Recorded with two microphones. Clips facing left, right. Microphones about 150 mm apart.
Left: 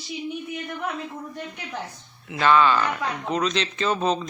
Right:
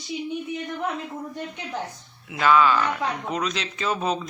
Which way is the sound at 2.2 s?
5° right (ahead or behind).